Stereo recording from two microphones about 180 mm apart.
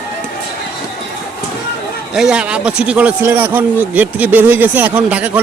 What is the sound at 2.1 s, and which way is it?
Speech, 5° right (ahead or behind).